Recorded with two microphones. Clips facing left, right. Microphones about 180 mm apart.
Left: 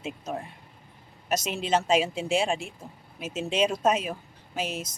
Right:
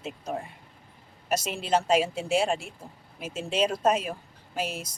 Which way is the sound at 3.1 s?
5° left (ahead or behind).